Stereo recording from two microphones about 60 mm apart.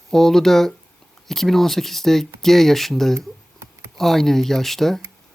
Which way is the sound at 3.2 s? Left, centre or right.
Right.